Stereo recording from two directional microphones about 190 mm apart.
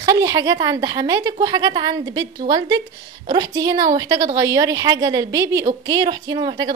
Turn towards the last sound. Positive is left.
turn(degrees=-25)  # may be behind; listen again after turning